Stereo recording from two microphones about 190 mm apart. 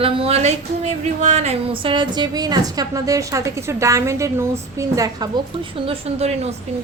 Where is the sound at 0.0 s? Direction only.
30° right (ahead or behind).